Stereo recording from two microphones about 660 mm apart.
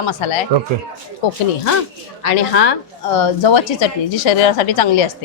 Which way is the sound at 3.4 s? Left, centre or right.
Left.